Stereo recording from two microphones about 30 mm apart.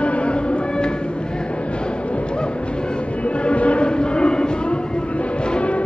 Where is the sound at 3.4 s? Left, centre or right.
Left.